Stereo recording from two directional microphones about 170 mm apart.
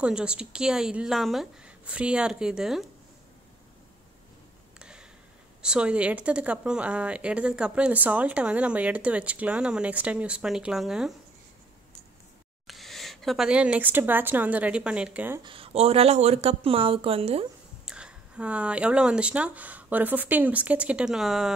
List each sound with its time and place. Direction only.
0.0 s a woman's voice: 5° right (ahead or behind)
4.7 s a sound: 5° right (ahead or behind)
5.6 s speech: 5° right (ahead or behind)
12.6 s speech: centre (ahead or behind)
15.4 s speech: 30° right (ahead or behind)
17.8 s speech: 5° right (ahead or behind)